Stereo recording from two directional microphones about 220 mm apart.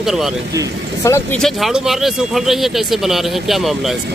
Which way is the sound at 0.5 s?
15° right (ahead or behind).